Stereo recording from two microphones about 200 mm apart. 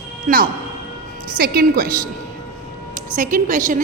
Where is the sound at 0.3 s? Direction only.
40° right (ahead or behind).